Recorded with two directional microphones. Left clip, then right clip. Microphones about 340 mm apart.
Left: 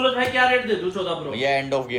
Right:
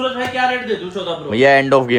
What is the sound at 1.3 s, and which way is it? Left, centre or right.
Speech, right.